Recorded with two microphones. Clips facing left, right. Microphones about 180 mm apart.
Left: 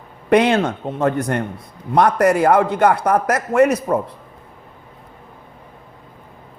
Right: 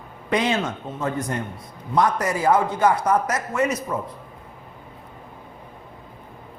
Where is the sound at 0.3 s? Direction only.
65° left (ahead or behind).